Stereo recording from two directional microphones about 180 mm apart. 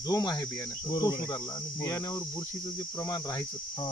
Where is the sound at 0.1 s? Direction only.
20° left (ahead or behind).